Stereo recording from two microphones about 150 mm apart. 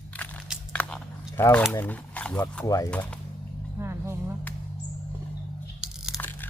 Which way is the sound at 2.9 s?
5° left (ahead or behind).